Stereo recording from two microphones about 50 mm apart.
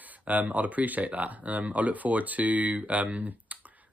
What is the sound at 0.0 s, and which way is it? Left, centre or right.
Speech, right.